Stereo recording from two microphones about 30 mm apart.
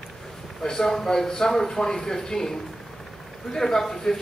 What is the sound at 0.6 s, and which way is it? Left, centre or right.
A man's voice, centre.